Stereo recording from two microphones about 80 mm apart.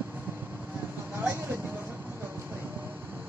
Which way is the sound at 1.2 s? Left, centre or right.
Right.